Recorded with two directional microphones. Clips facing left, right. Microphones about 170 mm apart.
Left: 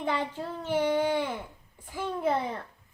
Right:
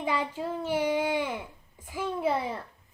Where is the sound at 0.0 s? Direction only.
10° right (ahead or behind).